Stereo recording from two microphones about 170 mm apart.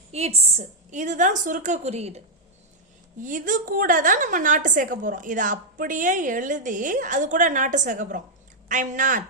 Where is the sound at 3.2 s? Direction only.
50° right (ahead or behind).